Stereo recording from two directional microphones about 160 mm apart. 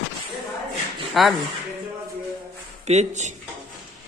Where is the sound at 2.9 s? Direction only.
45° right (ahead or behind).